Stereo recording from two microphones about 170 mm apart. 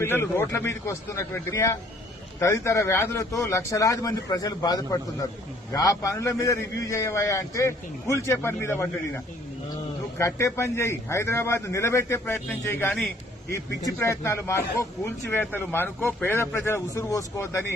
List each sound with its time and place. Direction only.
0.0 s a man's voice: 15° left (ahead or behind)